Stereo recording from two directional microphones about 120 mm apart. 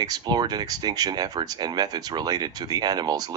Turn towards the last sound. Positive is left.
turn(degrees=-35)  # may be behind; listen again after turning